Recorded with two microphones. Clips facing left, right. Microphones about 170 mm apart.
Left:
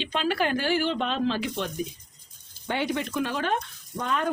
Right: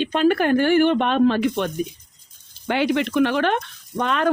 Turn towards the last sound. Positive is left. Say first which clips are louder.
# right 6 dB
turn(degrees=-80)